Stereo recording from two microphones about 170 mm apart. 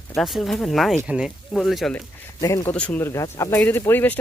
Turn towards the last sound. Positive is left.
turn(degrees=10)  # may be behind; listen again after turning